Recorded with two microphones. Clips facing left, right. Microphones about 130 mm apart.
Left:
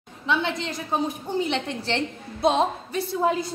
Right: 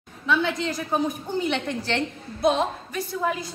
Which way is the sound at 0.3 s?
25° left (ahead or behind).